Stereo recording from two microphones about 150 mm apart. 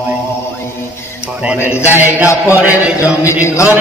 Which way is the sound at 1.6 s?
15° left (ahead or behind).